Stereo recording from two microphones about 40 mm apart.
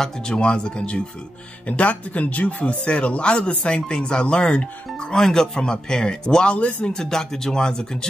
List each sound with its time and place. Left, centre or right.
0.0 s speech: centre
1.7 s speech: left
5.2 s speech: centre; by 6.9 s left
6.9 s speech: centre